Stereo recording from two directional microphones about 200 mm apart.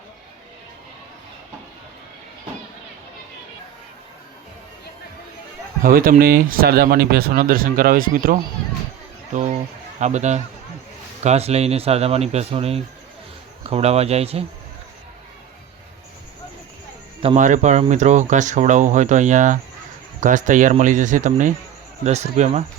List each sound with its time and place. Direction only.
5.8 s speech: 45° right (ahead or behind)
10.0 s speech: 35° right (ahead or behind)
17.2 s speech: 35° right (ahead or behind)